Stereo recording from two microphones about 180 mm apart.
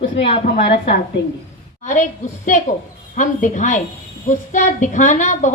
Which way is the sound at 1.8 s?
45° left (ahead or behind).